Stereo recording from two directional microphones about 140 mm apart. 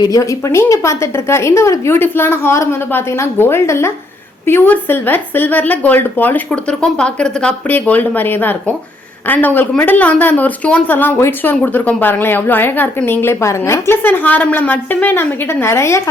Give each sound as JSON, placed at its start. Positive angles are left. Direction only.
{"t": 0.0, "sound": "a woman's voice", "side_deg": 25}